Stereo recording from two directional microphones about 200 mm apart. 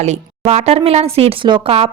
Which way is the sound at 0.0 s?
35° right (ahead or behind).